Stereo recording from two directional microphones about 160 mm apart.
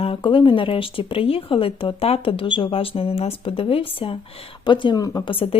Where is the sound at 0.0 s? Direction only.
35° left (ahead or behind).